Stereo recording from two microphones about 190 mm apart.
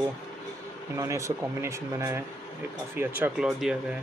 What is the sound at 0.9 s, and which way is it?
Speech, 15° right (ahead or behind).